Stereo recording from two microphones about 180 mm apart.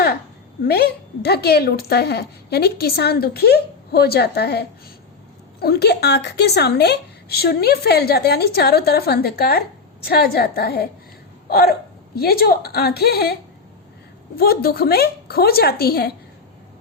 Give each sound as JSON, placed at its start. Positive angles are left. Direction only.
{"t": 0.6, "sound": "speech", "side_deg": 60}
{"t": 11.4, "sound": "hiccup", "side_deg": 60}
{"t": 12.1, "sound": "speech", "side_deg": 60}
{"t": 14.3, "sound": "speech", "side_deg": 55}